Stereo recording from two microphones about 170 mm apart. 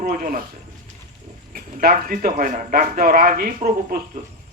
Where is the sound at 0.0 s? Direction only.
55° right (ahead or behind).